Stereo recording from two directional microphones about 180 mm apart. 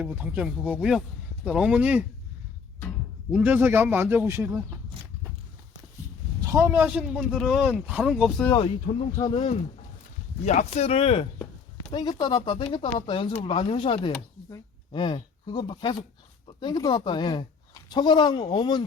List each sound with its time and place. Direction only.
0.0 s a man's voice: 10° right (ahead or behind)
3.3 s speech: 10° right (ahead or behind)
6.4 s a man's voice: 15° right (ahead or behind)
8.5 s speech: 30° left (ahead or behind)
10.4 s speech: 40° left (ahead or behind); by 18.8 s 25° left (ahead or behind)